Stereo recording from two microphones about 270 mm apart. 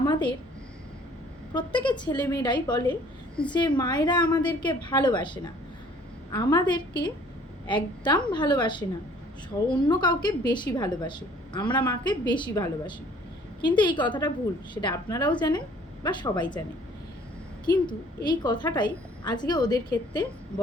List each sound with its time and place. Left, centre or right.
0.0 s a sound: centre
1.5 s a woman's voice: centre
17.7 s a woman's voice: centre